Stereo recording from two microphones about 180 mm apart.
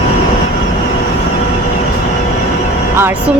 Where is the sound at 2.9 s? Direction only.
15° right (ahead or behind).